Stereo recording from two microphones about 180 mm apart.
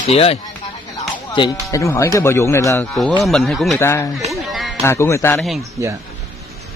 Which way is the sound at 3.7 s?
15° left (ahead or behind).